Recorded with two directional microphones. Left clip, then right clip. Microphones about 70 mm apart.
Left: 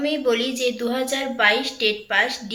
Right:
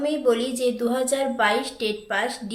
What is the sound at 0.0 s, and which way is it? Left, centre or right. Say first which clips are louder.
A woman's voice: left 1 dB; right.